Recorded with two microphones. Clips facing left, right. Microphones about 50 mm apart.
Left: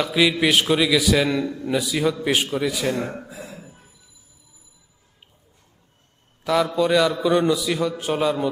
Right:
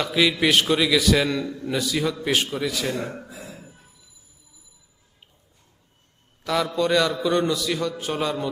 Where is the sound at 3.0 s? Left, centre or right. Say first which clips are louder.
Left 3 dB; left.